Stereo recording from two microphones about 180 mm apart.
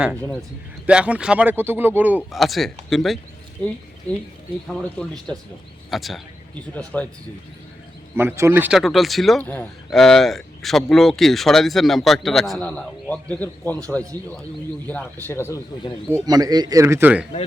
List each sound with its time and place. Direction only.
0.9 s speech: 5° right (ahead or behind)
4.7 s a man's voice: 5° left (ahead or behind)
8.1 s a man's voice: 15° right (ahead or behind); by 15.6 s 15° left (ahead or behind)
16.2 s speech: 20° right (ahead or behind)